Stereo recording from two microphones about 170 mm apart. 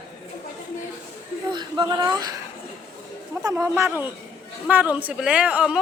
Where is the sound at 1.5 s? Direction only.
25° right (ahead or behind).